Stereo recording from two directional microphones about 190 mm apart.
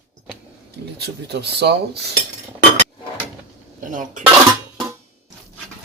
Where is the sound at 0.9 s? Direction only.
60° right (ahead or behind).